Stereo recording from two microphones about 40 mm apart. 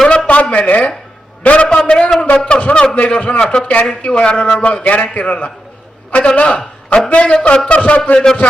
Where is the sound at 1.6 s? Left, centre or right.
Centre.